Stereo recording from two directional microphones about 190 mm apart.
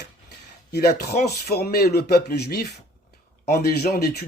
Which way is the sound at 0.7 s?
55° left (ahead or behind).